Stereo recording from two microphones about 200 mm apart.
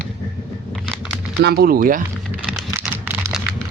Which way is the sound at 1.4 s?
55° right (ahead or behind).